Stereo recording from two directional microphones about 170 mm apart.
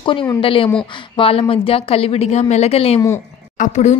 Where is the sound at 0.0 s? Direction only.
30° left (ahead or behind).